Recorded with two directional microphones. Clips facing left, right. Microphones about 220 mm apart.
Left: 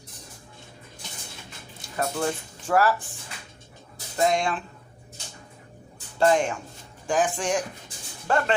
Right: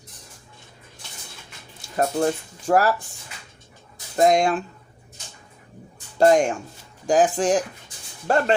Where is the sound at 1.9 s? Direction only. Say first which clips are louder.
Right 5 dB; 40° right (ahead or behind).